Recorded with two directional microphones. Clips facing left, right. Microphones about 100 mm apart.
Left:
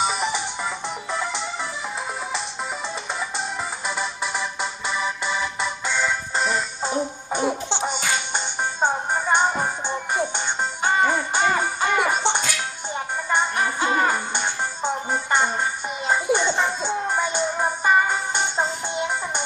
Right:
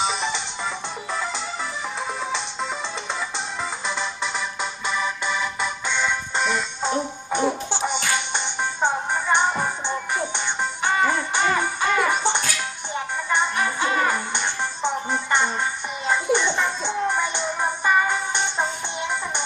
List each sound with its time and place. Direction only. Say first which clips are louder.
0.0 s music: left 1 dB; 10° left (ahead or behind)
3.8 s music: left 1 dB; 5° left (ahead or behind)